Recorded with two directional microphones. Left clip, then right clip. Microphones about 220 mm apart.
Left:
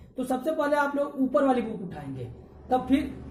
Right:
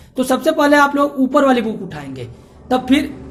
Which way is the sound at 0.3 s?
40° right (ahead or behind).